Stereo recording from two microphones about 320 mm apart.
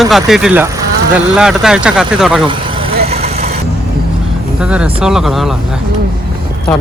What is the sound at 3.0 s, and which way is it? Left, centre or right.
Vehicle, centre.